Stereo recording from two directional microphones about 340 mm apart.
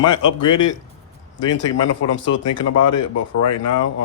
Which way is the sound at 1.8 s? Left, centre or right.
Left.